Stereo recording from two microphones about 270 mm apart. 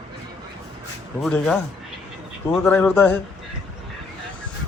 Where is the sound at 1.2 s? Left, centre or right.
Centre.